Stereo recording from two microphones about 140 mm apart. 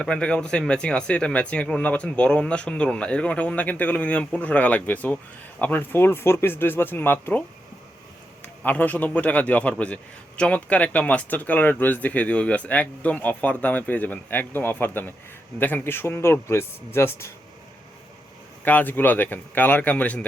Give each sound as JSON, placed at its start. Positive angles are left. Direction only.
{"t": 0.0, "sound": "speech", "side_deg": 5}
{"t": 8.6, "sound": "speech", "side_deg": 10}
{"t": 18.6, "sound": "speech", "side_deg": 15}